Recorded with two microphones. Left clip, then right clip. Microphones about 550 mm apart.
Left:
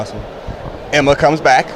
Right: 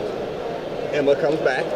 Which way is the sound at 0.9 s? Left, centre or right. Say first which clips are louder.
Left 8 dB; left.